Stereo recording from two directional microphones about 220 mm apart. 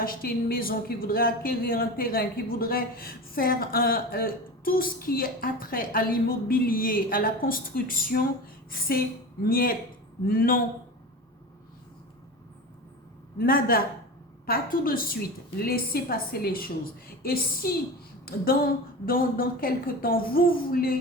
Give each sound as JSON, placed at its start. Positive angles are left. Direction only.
{"t": 0.0, "sound": "a woman's voice", "side_deg": 40}
{"t": 13.4, "sound": "a woman's voice", "side_deg": 40}